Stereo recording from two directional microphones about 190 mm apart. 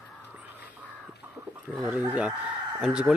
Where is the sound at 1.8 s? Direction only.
10° right (ahead or behind).